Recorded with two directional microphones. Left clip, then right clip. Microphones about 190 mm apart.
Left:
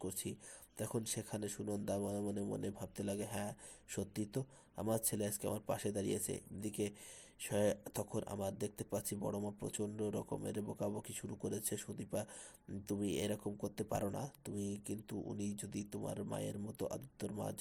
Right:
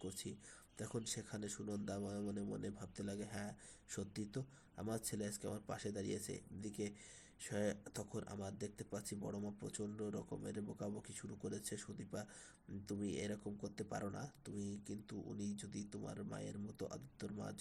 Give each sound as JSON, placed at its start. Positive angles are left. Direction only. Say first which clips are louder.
{"t": 0.0, "sound": "speech", "louder": "left 5 dB", "side_deg": 20}